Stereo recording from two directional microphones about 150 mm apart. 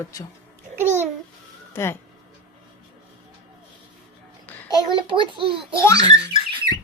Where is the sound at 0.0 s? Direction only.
20° left (ahead or behind).